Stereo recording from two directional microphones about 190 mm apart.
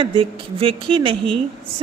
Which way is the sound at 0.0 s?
25° right (ahead or behind).